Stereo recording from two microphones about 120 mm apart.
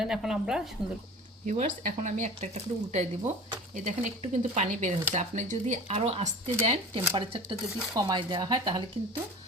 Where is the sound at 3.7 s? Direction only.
85° right.